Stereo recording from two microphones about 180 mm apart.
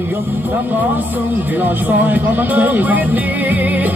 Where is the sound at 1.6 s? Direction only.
10° right (ahead or behind).